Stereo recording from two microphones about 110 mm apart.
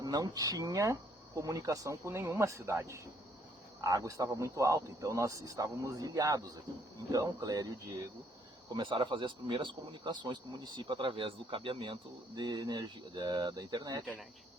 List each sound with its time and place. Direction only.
0.0 s speech: 35° right (ahead or behind)
8.7 s speech: 45° right (ahead or behind)